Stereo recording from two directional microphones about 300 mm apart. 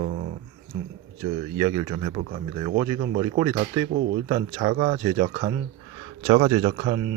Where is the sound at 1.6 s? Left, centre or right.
Centre.